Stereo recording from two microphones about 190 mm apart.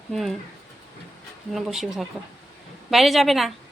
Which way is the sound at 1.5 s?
Centre (ahead or behind).